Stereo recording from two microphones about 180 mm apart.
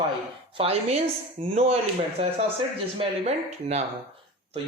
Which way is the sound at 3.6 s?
35° right (ahead or behind).